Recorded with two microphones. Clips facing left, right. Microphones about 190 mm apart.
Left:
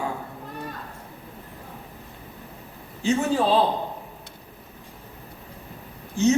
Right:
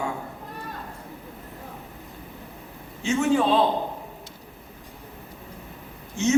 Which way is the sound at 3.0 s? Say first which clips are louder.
Even; 35° left (ahead or behind).